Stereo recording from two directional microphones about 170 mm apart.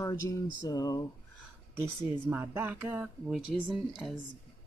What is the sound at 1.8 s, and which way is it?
Speech, 15° right (ahead or behind).